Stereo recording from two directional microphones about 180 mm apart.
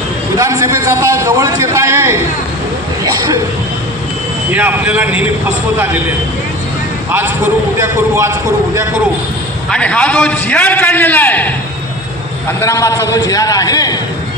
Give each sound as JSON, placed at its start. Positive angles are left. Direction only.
{"t": 0.4, "sound": "a man's voice", "side_deg": -15}
{"t": 4.5, "sound": "a man's voice", "side_deg": -10}
{"t": 9.7, "sound": "a man's voice", "side_deg": 5}